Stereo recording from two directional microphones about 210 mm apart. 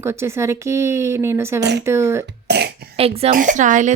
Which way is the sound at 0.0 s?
10° right (ahead or behind).